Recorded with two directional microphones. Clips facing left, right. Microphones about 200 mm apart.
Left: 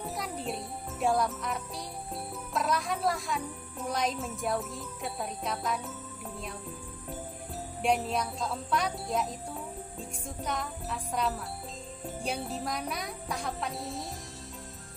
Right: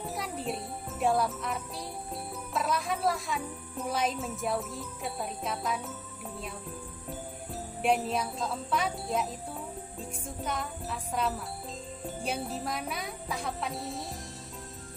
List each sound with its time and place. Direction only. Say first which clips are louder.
0.0 s jingle bell: right 1 dB; centre (ahead or behind)
2.5 s speech: even; centre (ahead or behind)
7.8 s speech: right 1 dB; centre (ahead or behind)